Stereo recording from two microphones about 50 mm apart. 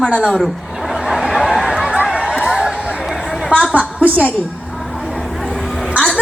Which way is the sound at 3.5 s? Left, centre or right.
Right.